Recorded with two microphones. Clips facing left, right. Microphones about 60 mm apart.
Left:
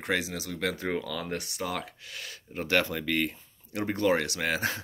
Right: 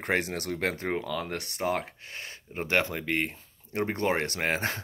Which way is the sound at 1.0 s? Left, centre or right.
Centre.